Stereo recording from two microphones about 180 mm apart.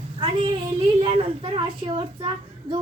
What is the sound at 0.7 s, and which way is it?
A child's voice, 30° right (ahead or behind).